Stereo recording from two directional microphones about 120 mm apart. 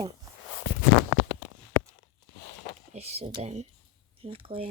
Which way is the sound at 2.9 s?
60° right (ahead or behind).